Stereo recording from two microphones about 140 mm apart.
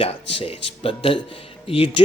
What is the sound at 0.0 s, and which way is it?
Speech, 45° left (ahead or behind).